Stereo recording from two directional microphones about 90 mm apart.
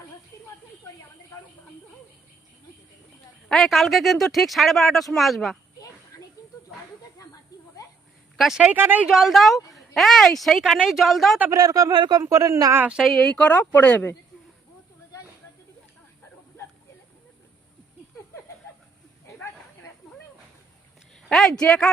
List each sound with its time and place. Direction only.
3.5 s speech: centre (ahead or behind)
6.1 s snake: 40° left (ahead or behind)
7.5 s a sound: 40° left (ahead or behind)
8.4 s speech: 5° right (ahead or behind)
8.7 s speech: 20° right (ahead or behind)
9.0 s speech: 5° right (ahead or behind)
11.5 s a woman's voice: 40° right (ahead or behind)
11.9 s speech: 55° right (ahead or behind)
12.2 s a woman's voice: 40° right (ahead or behind)
13.0 s speech: centre (ahead or behind); by 14.1 s 20° left (ahead or behind)
21.2 s speech: 5° left (ahead or behind)